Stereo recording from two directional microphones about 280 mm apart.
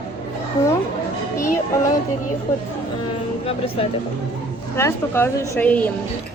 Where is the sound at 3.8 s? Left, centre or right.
Left.